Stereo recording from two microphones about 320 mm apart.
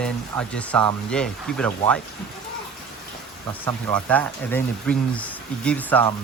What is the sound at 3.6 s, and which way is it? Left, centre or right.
Speech, centre.